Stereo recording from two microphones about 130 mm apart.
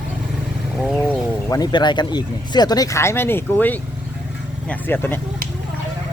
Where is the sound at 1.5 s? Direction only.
35° left (ahead or behind); by 5.2 s 15° left (ahead or behind).